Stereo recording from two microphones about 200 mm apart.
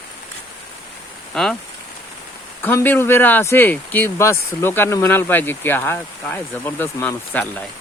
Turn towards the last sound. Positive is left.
turn(degrees=10)  # may be behind; listen again after turning